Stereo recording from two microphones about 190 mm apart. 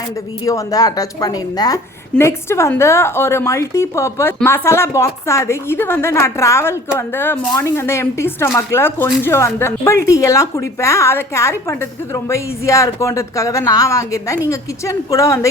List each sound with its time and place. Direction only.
0.4 s a woman's voice: 20° left (ahead or behind)